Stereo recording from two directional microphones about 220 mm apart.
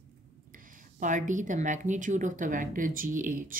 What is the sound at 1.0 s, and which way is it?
Speech, 35° right (ahead or behind).